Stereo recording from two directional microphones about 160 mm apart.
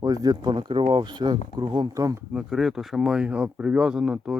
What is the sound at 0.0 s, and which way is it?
Speech, 20° right (ahead or behind).